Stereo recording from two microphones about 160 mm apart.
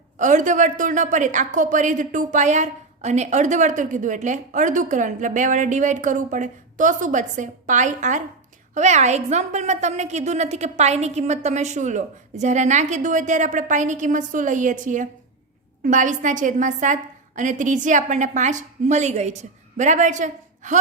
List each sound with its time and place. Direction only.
0.2 s a woman's voice: 50° right (ahead or behind)